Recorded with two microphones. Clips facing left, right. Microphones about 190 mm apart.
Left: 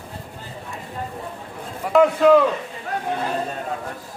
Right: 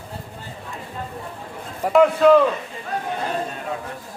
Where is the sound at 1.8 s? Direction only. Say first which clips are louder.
Right 1 dB; 40° right (ahead or behind).